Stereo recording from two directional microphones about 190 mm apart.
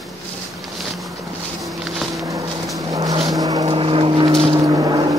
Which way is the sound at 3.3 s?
20° right (ahead or behind).